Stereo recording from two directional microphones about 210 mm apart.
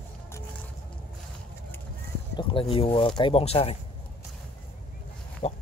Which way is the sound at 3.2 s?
25° left (ahead or behind).